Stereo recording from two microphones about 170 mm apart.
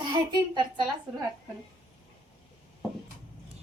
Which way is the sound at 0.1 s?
25° right (ahead or behind).